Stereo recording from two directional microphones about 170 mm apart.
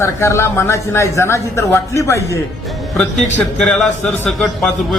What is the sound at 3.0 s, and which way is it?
A man's voice, 5° left (ahead or behind).